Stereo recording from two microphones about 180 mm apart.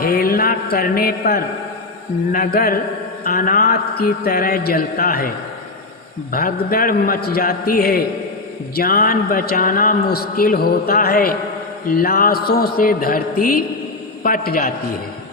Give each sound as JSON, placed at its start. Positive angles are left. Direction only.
{"t": 0.0, "sound": "a sound", "side_deg": 55}
{"t": 2.3, "sound": "a man's voice", "side_deg": 55}
{"t": 6.3, "sound": "a man's voice", "side_deg": 55}